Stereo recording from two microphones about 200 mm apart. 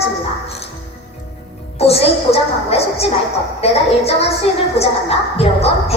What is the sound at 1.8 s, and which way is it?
A woman's voice, 30° left (ahead or behind).